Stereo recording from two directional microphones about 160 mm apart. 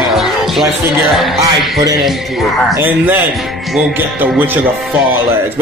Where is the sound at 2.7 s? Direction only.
10° right (ahead or behind).